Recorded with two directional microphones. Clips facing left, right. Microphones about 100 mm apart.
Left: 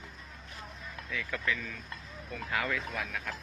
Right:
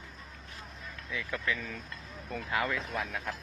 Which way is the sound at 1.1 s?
20° right (ahead or behind).